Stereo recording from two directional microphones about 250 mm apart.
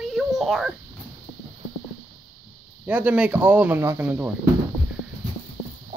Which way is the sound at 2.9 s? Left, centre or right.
Centre.